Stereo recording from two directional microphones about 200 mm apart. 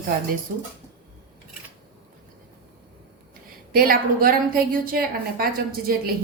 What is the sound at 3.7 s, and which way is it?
A woman's voice, 45° right (ahead or behind).